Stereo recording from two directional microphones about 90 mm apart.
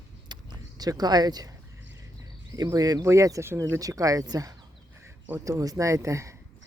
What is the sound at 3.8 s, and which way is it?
Speech, 40° right (ahead or behind).